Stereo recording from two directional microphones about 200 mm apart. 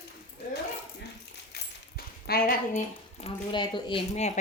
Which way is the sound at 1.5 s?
50° left (ahead or behind).